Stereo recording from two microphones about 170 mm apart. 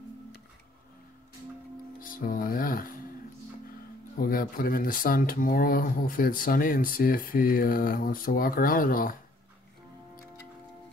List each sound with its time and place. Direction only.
2.0 s music: 55° left (ahead or behind)
4.2 s speech: 60° left (ahead or behind)